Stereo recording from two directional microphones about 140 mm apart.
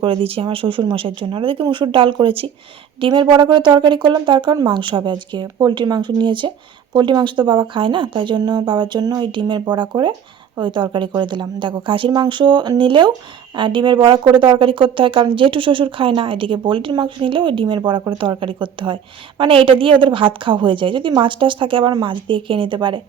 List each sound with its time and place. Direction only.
0.0 s speech: 40° right (ahead or behind)